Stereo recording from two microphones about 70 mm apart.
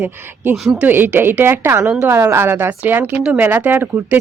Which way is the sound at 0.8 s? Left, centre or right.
Right.